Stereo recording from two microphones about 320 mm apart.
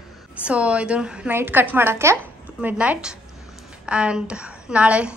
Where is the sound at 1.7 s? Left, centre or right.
Centre.